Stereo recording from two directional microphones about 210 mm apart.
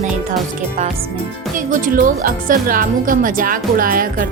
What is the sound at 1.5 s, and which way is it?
A woman's voice, 40° right (ahead or behind).